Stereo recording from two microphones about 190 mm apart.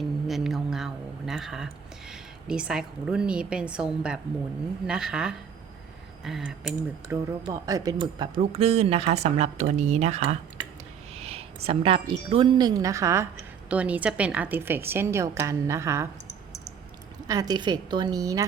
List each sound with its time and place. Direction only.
0.3 s speech: centre (ahead or behind)
7.4 s a woman's voice: 15° right (ahead or behind)
17.2 s a woman's voice: 20° right (ahead or behind)